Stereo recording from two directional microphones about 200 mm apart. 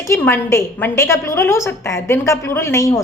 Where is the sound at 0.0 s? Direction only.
15° left (ahead or behind).